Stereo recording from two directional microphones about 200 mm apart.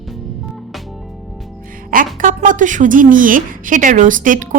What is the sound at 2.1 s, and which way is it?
A woman's voice, 40° right (ahead or behind).